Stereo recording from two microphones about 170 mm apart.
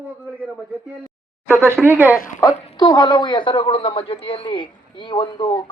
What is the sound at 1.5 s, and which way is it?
Speech, 15° right (ahead or behind).